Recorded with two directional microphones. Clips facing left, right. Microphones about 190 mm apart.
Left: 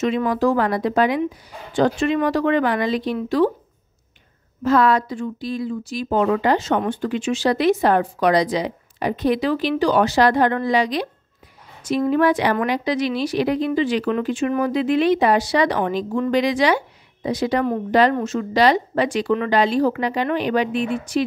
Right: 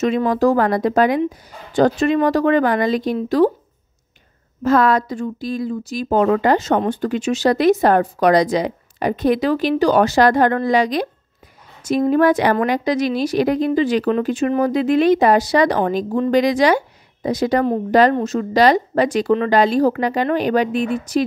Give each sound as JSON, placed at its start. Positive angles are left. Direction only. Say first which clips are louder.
{"t": 0.0, "sound": "a woman's voice", "louder": "right 3 dB", "side_deg": -45}
{"t": 4.6, "sound": "a woman's voice", "louder": "right 2 dB", "side_deg": -45}
{"t": 12.1, "sound": "a woman's voice", "louder": "right 3 dB", "side_deg": -45}